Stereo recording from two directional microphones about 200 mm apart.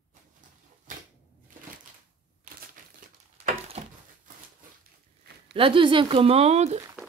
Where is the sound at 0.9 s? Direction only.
40° right (ahead or behind).